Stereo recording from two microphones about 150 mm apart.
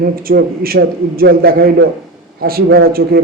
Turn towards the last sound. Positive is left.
turn(degrees=-85)